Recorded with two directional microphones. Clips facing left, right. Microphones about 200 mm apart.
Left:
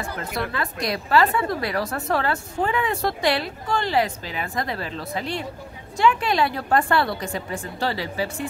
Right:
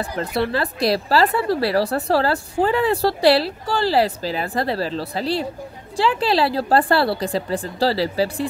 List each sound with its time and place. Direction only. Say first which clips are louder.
0.2 s a woman's voice: right 8 dB; 35° right (ahead or behind)